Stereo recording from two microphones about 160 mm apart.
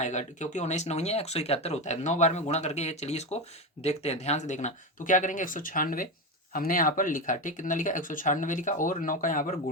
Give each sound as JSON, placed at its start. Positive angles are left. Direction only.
{"t": 0.0, "sound": "speech", "side_deg": 45}